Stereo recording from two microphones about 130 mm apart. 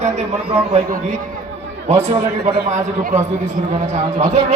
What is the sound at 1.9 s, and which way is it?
Speech, 60° right (ahead or behind).